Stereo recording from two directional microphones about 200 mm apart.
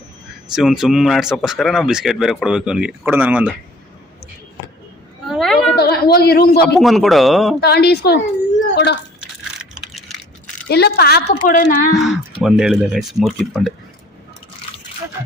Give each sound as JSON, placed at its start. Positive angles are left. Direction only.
{"t": 0.5, "sound": "speech", "side_deg": 0}
{"t": 5.3, "sound": "a sound", "side_deg": 0}
{"t": 5.8, "sound": "a man's voice", "side_deg": 50}
{"t": 6.7, "sound": "speech", "side_deg": 0}
{"t": 7.6, "sound": "a woman's voice", "side_deg": 55}
{"t": 8.6, "sound": "a sound", "side_deg": 60}
{"t": 9.6, "sound": "a sound", "side_deg": 0}
{"t": 10.7, "sound": "a woman's voice", "side_deg": 55}
{"t": 11.4, "sound": "a woman's voice", "side_deg": 40}
{"t": 12.4, "sound": "speech", "side_deg": -5}